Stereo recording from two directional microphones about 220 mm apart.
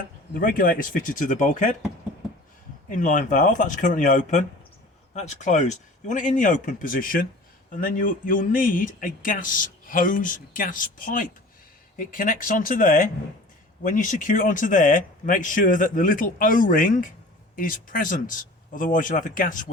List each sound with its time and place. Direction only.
0.3 s speech: 40° left (ahead or behind)
2.9 s speech: 35° left (ahead or behind)